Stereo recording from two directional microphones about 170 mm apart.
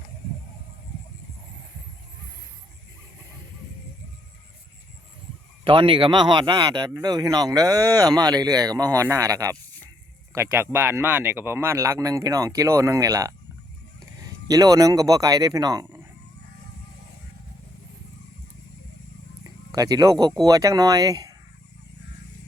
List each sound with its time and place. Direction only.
5.6 s speech: 30° right (ahead or behind)
19.7 s speech: 20° right (ahead or behind)